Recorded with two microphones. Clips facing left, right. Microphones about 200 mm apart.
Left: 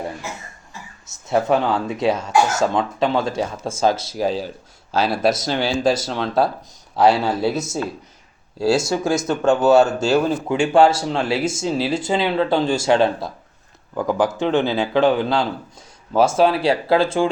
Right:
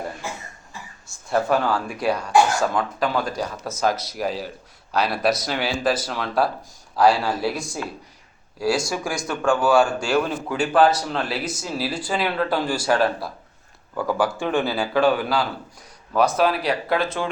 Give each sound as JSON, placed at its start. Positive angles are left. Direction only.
{"t": 1.0, "sound": "speech", "side_deg": 20}
{"t": 5.0, "sound": "speech", "side_deg": 0}
{"t": 5.3, "sound": "speech", "side_deg": 25}